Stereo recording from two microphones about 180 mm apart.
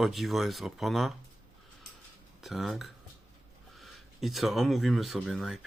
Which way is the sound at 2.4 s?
Centre (ahead or behind).